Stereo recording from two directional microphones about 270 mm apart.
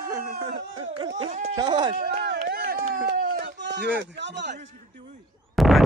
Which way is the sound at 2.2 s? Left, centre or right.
Right.